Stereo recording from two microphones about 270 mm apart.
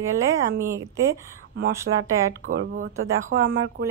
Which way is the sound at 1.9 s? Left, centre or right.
Right.